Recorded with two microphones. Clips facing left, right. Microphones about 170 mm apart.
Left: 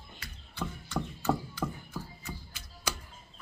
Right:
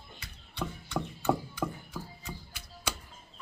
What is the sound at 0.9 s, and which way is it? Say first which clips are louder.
Music: right 1 dB; 15° right (ahead or behind).